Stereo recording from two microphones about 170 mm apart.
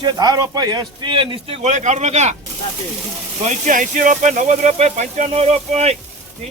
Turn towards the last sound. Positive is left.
turn(degrees=-40)  # may be behind; listen again after turning